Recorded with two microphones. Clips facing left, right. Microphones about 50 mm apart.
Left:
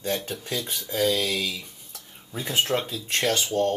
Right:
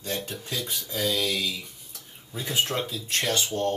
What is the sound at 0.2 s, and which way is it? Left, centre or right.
Speech, left.